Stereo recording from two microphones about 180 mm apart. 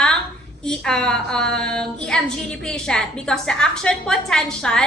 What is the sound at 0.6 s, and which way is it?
A woman's voice, 5° left (ahead or behind).